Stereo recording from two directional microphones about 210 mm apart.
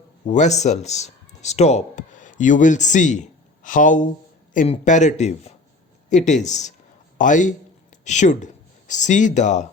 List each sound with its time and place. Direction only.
0.3 s a man's voice: 35° left (ahead or behind)